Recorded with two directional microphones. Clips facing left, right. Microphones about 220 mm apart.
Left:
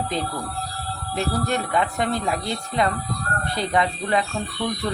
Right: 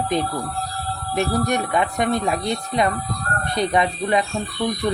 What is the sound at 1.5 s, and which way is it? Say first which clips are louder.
Speech: right 2 dB; 15° right (ahead or behind).